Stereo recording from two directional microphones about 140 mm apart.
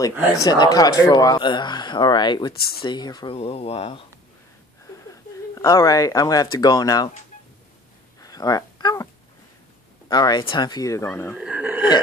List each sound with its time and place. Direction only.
0.4 s speech: 25° left (ahead or behind)
2.5 s speech: 90° left
2.8 s speech: 30° left (ahead or behind)
3.3 s speech: 45° left (ahead or behind)
5.5 s speech: 20° left (ahead or behind)
8.2 s a sound: 25° left (ahead or behind)
10.0 s speech: 30° left (ahead or behind)
11.3 s a sound: 5° right (ahead or behind)